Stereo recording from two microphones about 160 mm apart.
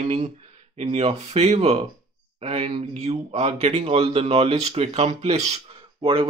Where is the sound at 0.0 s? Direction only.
45° right (ahead or behind).